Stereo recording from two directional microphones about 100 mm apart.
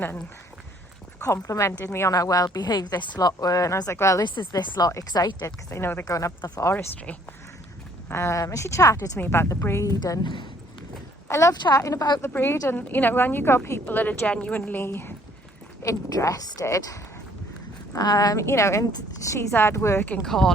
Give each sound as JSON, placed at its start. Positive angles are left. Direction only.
{"t": 1.5, "sound": "a woman's voice", "side_deg": 30}
{"t": 4.2, "sound": "a woman's voice", "side_deg": 50}
{"t": 5.7, "sound": "speech", "side_deg": 20}
{"t": 6.1, "sound": "a woman's voice", "side_deg": 35}
{"t": 6.7, "sound": "speech", "side_deg": 15}
{"t": 8.0, "sound": "speech", "side_deg": 25}
{"t": 9.1, "sound": "speech", "side_deg": 20}
{"t": 10.0, "sound": "speech", "side_deg": 50}
{"t": 11.3, "sound": "a woman's voice", "side_deg": 30}
{"t": 15.8, "sound": "a woman's voice", "side_deg": 35}
{"t": 18.4, "sound": "speech", "side_deg": 30}
{"t": 20.2, "sound": "speech", "side_deg": 5}